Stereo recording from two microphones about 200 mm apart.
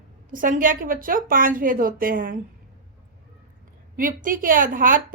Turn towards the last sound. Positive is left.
turn(degrees=-45)  # may be behind; listen again after turning